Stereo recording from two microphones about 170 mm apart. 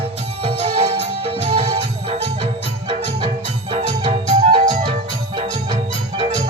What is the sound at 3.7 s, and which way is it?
Music, 35° right (ahead or behind).